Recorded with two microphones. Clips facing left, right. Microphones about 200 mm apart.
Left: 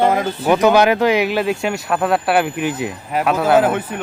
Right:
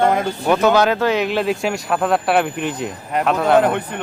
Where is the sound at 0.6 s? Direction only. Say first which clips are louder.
Left 3 dB; 15° left (ahead or behind).